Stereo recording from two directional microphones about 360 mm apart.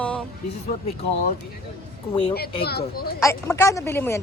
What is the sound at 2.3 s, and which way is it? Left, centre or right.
Speech, left.